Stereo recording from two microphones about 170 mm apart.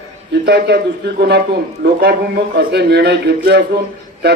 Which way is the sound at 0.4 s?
70° right (ahead or behind).